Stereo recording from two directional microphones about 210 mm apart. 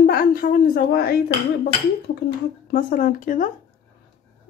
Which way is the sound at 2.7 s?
45° left (ahead or behind).